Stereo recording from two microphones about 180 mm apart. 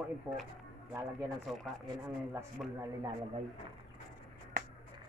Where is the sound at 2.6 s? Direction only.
5° right (ahead or behind).